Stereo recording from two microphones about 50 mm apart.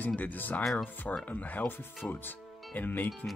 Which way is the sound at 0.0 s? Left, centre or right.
Left.